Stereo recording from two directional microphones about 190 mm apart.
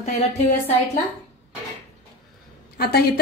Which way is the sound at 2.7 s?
55° left (ahead or behind).